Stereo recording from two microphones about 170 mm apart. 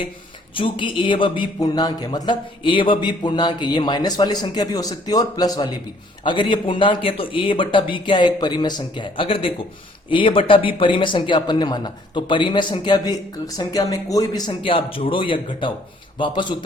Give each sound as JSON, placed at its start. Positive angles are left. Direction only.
{"t": 0.5, "sound": "speech", "side_deg": 30}